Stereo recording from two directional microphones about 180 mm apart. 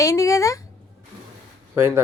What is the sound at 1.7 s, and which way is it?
Speech, 15° right (ahead or behind).